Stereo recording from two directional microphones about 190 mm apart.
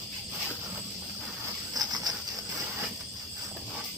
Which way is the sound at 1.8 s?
20° right (ahead or behind).